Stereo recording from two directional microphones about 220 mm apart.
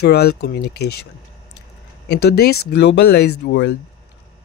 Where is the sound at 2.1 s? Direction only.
50° left (ahead or behind).